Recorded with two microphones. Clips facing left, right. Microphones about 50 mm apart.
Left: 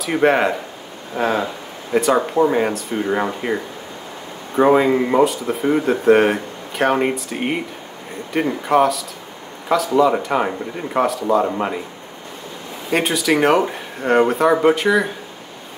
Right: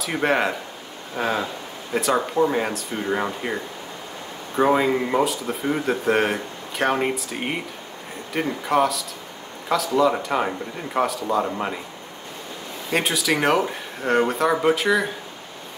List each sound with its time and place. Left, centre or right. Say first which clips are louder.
0.0 s speech: left 5 dB; centre
4.6 s speech: left 5 dB; centre
5.6 s speech: left 6 dB; centre
12.9 s speech: left 4 dB; centre